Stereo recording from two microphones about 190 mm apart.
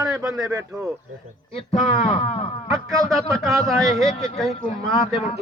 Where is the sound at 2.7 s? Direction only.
Centre (ahead or behind).